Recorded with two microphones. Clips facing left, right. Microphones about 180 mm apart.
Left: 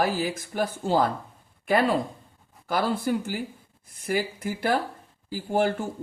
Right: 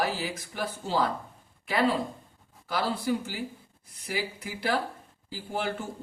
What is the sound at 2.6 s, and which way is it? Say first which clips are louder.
Speech: left 3 dB; 50° left (ahead or behind).